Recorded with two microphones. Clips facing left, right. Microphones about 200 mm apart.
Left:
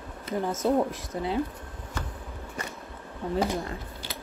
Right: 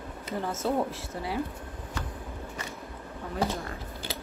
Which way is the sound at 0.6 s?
20° left (ahead or behind).